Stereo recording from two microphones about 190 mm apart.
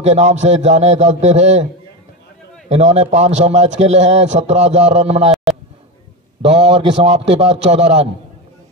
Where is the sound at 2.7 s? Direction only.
35° right (ahead or behind).